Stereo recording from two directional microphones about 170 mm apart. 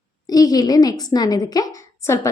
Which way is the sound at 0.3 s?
20° left (ahead or behind).